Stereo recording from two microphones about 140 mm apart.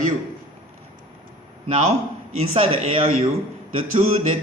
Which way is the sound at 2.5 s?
40° right (ahead or behind).